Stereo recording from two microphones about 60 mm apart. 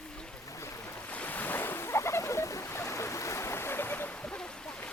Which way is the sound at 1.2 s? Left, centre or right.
Left.